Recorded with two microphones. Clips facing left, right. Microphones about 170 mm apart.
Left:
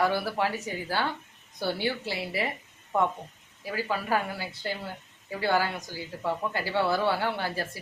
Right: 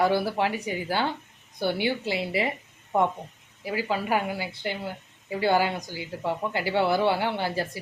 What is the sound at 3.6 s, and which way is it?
A woman's voice, 20° right (ahead or behind).